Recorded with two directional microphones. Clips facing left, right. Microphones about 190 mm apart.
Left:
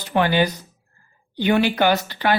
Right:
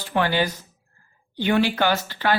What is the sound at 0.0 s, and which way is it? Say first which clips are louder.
Speech: left 3 dB; 20° left (ahead or behind).